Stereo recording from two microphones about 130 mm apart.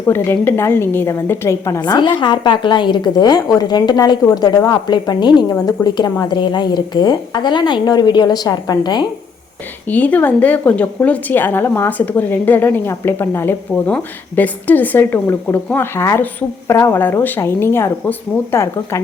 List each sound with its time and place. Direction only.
0.1 s a woman's voice: 15° left (ahead or behind); by 9.0 s 35° left (ahead or behind)
9.8 s a woman's voice: 10° left (ahead or behind)